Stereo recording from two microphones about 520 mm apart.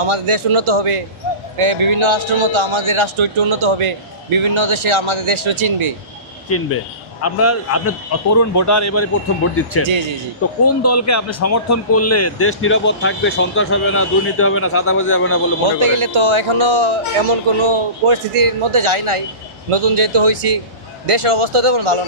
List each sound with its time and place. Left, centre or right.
0.0 s a man's voice: right
6.5 s a man's voice: left
15.8 s a man's voice: right